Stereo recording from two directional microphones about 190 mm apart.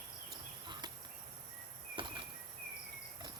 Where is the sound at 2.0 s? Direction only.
25° right (ahead or behind).